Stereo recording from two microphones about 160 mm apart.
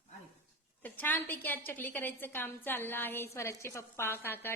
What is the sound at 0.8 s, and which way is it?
A woman's voice, 10° left (ahead or behind).